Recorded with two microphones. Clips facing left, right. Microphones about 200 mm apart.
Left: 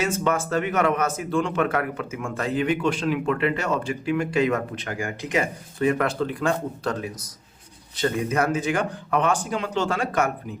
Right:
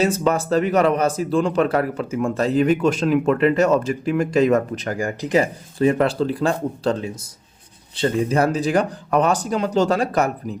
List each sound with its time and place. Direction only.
0.0 s speech: 35° right (ahead or behind)